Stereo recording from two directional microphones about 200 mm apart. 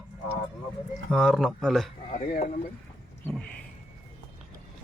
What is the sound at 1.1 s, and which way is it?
Speech, centre (ahead or behind).